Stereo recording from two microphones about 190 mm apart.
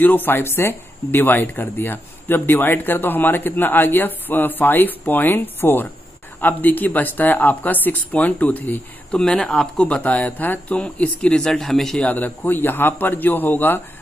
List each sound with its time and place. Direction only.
0.0 s speech: 10° left (ahead or behind)